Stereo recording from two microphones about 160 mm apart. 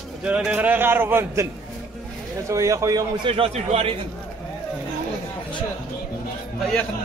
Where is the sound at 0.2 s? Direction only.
5° right (ahead or behind).